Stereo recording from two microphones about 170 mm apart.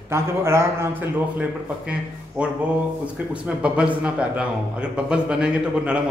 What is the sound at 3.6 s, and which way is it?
A man's voice, 5° right (ahead or behind).